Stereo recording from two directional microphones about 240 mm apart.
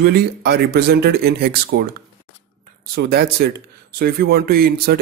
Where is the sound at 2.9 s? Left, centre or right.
Right.